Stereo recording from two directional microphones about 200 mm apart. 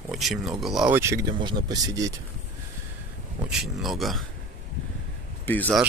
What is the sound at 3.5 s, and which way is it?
Speech, centre (ahead or behind).